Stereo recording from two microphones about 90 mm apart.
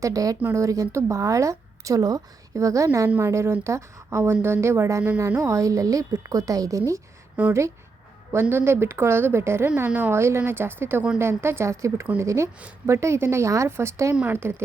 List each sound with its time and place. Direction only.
0.0 s a woman's voice: 40° right (ahead or behind)
7.4 s speech: 15° right (ahead or behind)
8.3 s a woman's voice: 30° right (ahead or behind)